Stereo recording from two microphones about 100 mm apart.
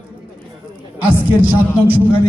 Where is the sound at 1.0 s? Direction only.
15° right (ahead or behind).